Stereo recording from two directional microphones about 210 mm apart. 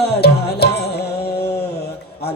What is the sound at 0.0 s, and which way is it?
Music, 50° left (ahead or behind).